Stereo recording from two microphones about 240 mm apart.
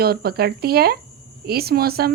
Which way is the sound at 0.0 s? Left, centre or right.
Right.